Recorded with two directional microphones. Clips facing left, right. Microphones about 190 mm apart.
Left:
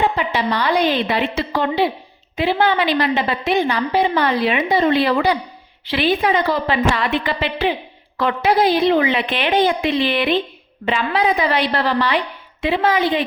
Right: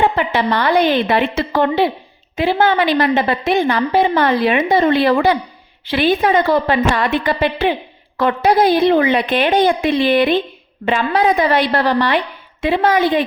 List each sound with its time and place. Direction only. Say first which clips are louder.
0.0 s a woman's voice: right 3 dB; 55° right (ahead or behind)